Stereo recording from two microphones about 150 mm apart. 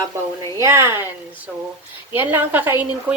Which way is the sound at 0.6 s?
15° right (ahead or behind).